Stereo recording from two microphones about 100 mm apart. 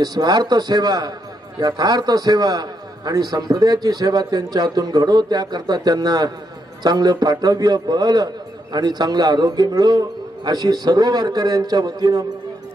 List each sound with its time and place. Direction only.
0.0 s a man's voice: 45° right (ahead or behind)